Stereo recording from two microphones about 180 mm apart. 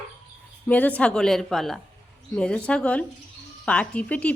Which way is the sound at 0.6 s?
10° left (ahead or behind).